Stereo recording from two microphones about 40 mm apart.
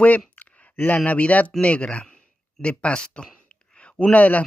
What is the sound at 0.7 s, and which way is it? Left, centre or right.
Speech, left.